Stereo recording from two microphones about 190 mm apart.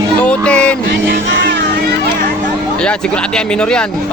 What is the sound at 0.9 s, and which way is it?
Music, 60° right (ahead or behind).